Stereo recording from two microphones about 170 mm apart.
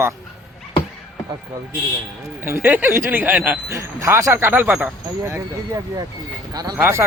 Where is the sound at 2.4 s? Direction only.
15° right (ahead or behind).